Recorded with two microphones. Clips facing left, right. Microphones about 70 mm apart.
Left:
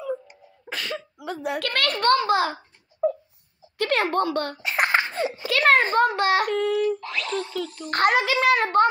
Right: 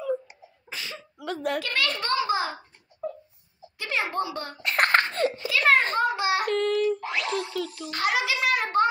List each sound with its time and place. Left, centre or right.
0.7 s sneeze: left
1.1 s a woman's voice: centre
1.6 s a child's voice: left
3.7 s a child's voice: left
4.6 s a sound: centre
5.5 s a sound: left
5.9 s a child's voice: left
6.4 s child singing: centre
7.1 s speech: centre
7.9 s a child's voice: left